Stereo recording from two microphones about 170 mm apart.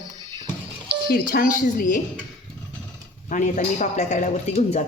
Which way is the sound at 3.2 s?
45° left (ahead or behind).